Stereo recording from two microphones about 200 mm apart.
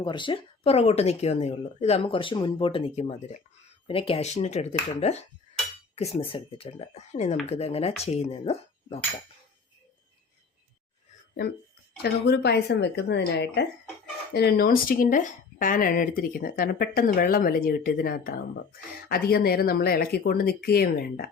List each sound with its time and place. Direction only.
0.0 s speech: 25° left (ahead or behind)
12.0 s speech: 55° left (ahead or behind)